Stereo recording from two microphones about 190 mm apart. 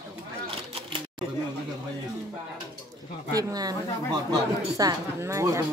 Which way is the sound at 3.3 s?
20° right (ahead or behind).